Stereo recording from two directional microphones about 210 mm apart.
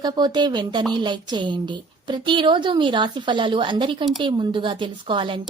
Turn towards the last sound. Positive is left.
turn(degrees=-25)  # may be behind; listen again after turning